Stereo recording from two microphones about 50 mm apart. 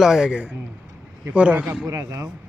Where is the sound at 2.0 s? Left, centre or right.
Right.